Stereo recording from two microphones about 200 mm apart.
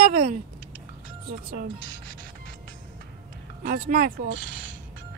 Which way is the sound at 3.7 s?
45° right (ahead or behind).